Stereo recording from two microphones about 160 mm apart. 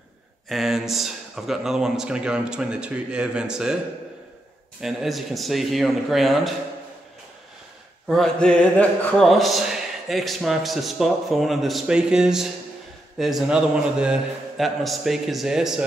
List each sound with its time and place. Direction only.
0.5 s speech: centre (ahead or behind)
4.8 s speech: centre (ahead or behind)
8.1 s speech: 5° left (ahead or behind)